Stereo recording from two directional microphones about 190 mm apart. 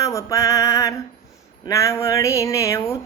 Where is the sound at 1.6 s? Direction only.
15° left (ahead or behind).